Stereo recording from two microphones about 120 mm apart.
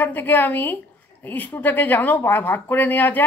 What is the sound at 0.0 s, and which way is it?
Speech, 15° left (ahead or behind).